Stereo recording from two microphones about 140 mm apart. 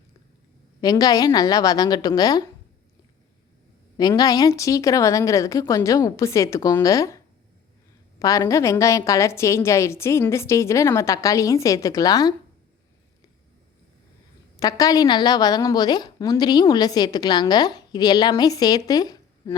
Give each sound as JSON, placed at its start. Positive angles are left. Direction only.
{"t": 0.8, "sound": "a woman's voice", "side_deg": 25}
{"t": 3.9, "sound": "a woman's voice", "side_deg": 30}
{"t": 8.2, "sound": "a woman's voice", "side_deg": 25}
{"t": 14.5, "sound": "a woman's voice", "side_deg": 25}